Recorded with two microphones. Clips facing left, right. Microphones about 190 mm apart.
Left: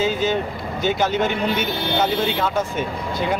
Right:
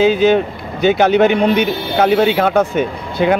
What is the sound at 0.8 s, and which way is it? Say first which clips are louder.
Speech: right 9 dB; 70° right (ahead or behind).